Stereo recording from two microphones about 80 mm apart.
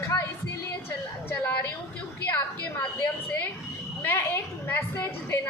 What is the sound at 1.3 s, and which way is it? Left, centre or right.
Speech, left.